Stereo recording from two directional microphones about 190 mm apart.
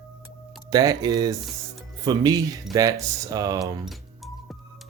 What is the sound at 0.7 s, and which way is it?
Speech, 20° right (ahead or behind).